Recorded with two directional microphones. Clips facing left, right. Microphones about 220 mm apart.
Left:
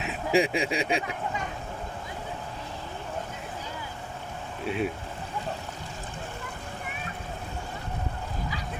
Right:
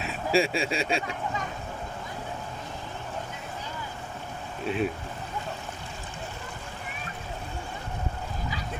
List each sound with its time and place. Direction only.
0.0 s speech: 15° left (ahead or behind)
4.6 s speech: 10° left (ahead or behind)